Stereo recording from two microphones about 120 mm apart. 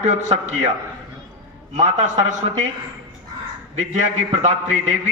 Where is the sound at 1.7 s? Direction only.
75° right (ahead or behind).